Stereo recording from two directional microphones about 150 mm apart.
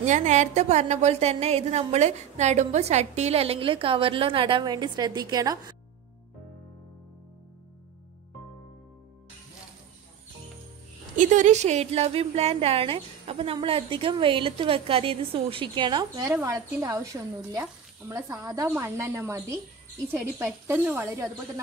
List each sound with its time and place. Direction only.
0.0 s a woman's voice: 55° right (ahead or behind); by 5.8 s 25° right (ahead or behind)
11.1 s a woman's voice: 55° right (ahead or behind); by 21.3 s 15° right (ahead or behind)